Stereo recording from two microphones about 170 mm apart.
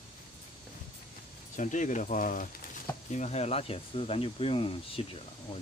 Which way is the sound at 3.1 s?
40° left (ahead or behind).